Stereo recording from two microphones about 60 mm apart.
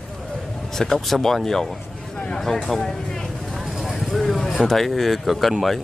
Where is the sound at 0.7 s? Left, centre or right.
Centre.